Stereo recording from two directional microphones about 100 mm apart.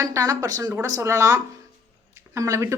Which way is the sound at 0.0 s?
35° right (ahead or behind).